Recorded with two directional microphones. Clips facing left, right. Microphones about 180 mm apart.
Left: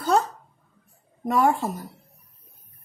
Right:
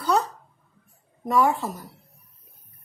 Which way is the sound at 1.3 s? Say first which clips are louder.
Even; 50° left (ahead or behind).